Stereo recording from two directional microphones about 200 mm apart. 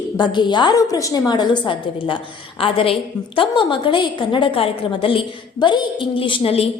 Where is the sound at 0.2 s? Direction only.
25° left (ahead or behind).